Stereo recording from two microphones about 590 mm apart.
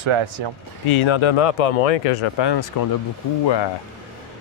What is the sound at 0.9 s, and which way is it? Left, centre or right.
Speech, left.